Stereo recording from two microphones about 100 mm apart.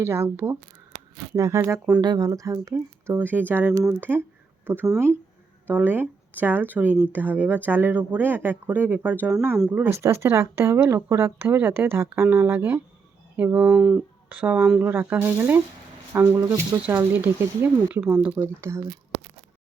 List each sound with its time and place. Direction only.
0.0 s speech: 25° right (ahead or behind)
2.0 s speech: 45° right (ahead or behind); by 18.4 s 15° right (ahead or behind)
18.4 s speech: 30° right (ahead or behind)